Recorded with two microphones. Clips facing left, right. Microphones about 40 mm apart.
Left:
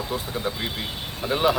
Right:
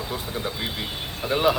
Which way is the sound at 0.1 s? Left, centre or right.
Centre.